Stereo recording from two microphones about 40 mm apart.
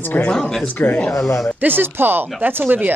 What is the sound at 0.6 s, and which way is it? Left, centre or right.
Speech, left.